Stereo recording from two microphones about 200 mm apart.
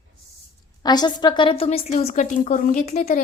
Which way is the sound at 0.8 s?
20° left (ahead or behind).